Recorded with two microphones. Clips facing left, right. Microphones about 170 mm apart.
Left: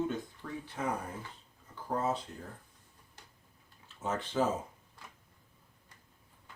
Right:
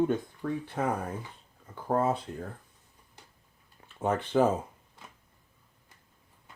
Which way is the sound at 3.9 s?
60° right (ahead or behind).